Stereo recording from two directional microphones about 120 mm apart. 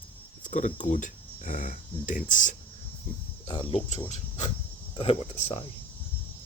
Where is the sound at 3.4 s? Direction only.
55° left (ahead or behind).